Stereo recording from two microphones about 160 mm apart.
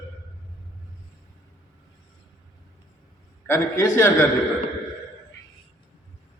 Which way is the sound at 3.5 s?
15° left (ahead or behind).